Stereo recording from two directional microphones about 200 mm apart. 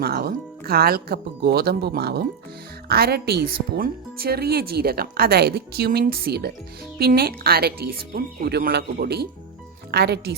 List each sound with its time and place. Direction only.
0.0 s speech: 50° right (ahead or behind)